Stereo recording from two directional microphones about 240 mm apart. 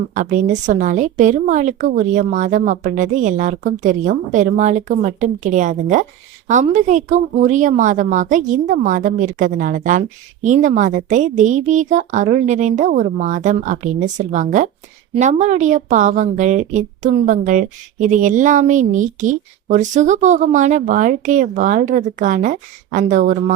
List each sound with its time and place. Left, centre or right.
0.1 s a woman's voice: right